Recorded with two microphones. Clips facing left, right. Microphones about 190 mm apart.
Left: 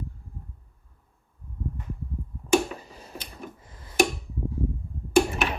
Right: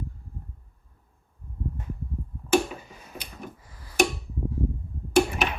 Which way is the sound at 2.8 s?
35° left (ahead or behind).